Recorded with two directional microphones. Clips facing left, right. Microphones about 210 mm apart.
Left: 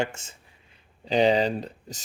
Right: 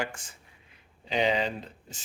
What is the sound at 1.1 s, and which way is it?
Speech, 35° left (ahead or behind).